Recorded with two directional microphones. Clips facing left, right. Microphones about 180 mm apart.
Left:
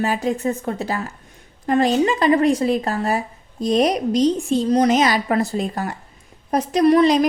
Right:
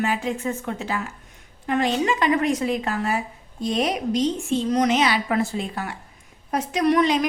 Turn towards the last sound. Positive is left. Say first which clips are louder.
# left 5 dB
turn(degrees=35)  # may be behind; listen again after turning